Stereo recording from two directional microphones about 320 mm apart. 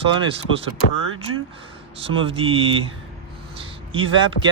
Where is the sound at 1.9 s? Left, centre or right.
Centre.